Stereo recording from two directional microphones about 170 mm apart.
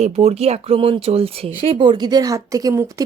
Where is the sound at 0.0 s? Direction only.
35° right (ahead or behind).